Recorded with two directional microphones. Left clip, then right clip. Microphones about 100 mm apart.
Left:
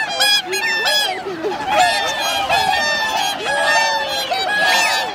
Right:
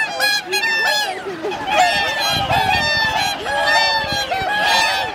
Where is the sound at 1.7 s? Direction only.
10° left (ahead or behind).